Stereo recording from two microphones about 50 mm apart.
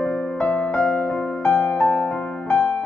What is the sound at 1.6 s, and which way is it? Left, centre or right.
Music, left.